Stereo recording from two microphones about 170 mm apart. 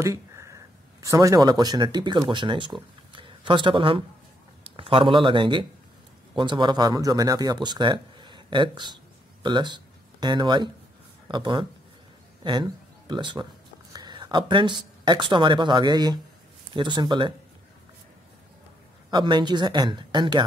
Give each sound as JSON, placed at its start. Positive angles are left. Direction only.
{"t": 0.0, "sound": "a sound", "side_deg": -15}
{"t": 1.0, "sound": "speech", "side_deg": -20}
{"t": 19.0, "sound": "speech", "side_deg": -25}